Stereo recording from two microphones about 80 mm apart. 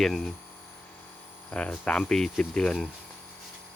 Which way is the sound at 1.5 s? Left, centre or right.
Centre.